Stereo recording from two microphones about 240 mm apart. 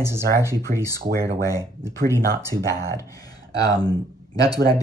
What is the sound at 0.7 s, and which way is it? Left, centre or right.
Speech, right.